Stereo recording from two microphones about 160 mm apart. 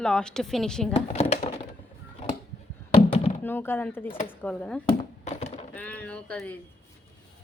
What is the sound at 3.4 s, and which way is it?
Speech, 15° left (ahead or behind).